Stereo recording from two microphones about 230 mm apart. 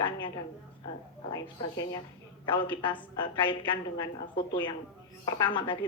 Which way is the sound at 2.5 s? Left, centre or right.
Left.